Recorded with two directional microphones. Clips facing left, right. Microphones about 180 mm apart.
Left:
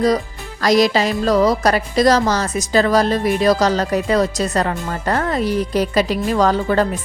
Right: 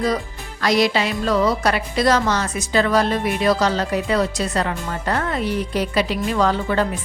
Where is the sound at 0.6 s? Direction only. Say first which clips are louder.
Left 4 dB; 40° left (ahead or behind).